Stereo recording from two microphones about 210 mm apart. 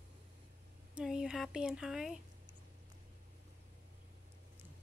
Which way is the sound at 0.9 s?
5° right (ahead or behind).